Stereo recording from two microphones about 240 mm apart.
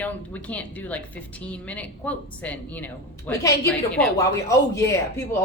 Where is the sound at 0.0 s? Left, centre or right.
Centre.